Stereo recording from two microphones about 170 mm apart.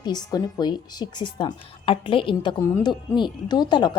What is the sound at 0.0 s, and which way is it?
Speech, 25° left (ahead or behind).